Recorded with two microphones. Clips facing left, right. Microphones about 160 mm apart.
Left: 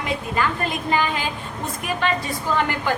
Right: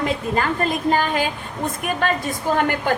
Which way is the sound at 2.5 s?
50° right (ahead or behind).